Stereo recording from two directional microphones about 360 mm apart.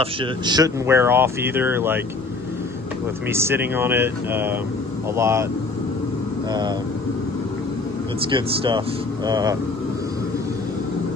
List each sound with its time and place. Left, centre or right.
0.0 s speech: centre
3.3 s speech: centre
8.3 s speech: centre